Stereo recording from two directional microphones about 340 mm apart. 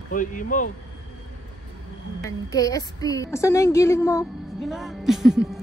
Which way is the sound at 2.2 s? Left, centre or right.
Centre.